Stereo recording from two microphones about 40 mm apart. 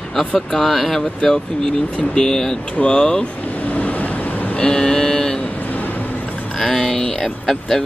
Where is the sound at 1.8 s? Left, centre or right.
Left.